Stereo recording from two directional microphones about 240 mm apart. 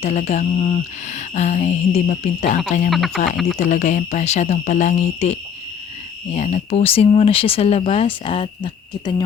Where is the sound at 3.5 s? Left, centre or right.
Left.